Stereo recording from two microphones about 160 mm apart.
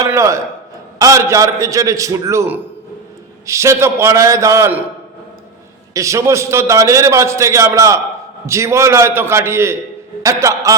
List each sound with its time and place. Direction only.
0.0 s a sound: 20° right (ahead or behind)
0.9 s a man's voice: 20° right (ahead or behind)
5.9 s a man's voice: 20° right (ahead or behind)